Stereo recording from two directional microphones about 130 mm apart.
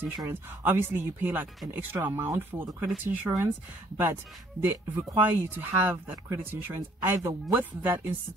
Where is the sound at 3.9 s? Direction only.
20° right (ahead or behind).